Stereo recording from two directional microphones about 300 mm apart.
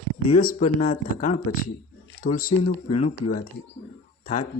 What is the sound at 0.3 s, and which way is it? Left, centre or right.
Speech, left.